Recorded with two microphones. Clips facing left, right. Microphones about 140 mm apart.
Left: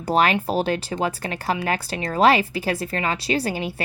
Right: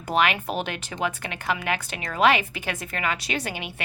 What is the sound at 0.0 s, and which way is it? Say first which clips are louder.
Speech: left 4 dB; 35° left (ahead or behind).